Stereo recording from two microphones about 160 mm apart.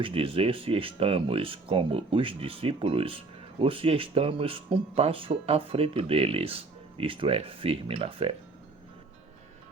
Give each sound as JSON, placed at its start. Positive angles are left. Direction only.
{"t": 0.0, "sound": "speech", "side_deg": -35}